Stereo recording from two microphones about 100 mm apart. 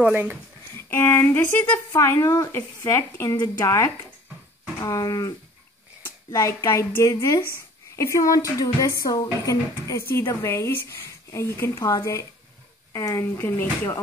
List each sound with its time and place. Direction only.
0.0 s speech: 15° right (ahead or behind)
0.7 s speech: 25° left (ahead or behind)
2.0 s speech: 30° left (ahead or behind)
6.3 s speech: 35° left (ahead or behind)